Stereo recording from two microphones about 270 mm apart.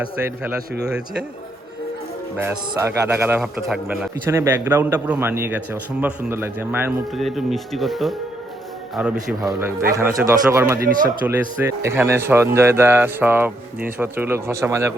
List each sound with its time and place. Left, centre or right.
2.4 s a man's voice: centre
10.8 s speech: right
11.3 s a man's voice: centre